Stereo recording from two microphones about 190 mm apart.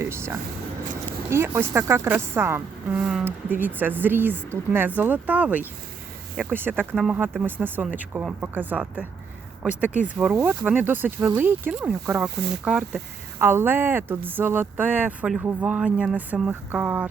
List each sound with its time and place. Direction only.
0.0 s a sound: 15° right (ahead or behind)
1.3 s speech: 15° right (ahead or behind)
3.0 s speech: centre (ahead or behind)
6.9 s speech: centre (ahead or behind)
7.2 s speech: 10° right (ahead or behind)